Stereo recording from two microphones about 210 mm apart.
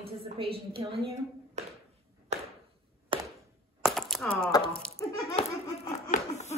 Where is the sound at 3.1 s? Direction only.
25° right (ahead or behind).